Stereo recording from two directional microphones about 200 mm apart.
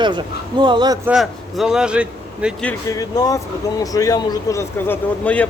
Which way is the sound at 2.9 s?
20° left (ahead or behind).